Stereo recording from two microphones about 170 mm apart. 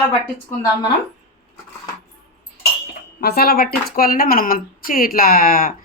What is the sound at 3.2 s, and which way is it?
Speech, 65° left (ahead or behind).